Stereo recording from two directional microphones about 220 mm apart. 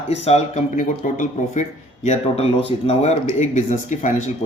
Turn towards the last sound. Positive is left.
turn(degrees=35)  # may be behind; listen again after turning